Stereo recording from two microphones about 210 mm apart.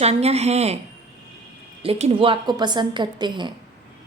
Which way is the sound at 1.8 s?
30° right (ahead or behind).